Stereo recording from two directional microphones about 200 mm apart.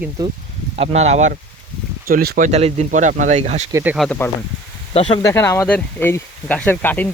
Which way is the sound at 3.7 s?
15° right (ahead or behind).